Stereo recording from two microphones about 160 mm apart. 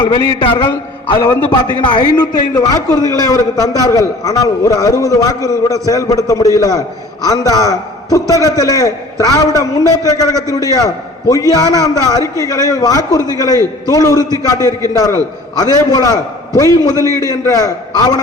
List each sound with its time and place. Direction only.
0.4 s a man's voice: 35° left (ahead or behind)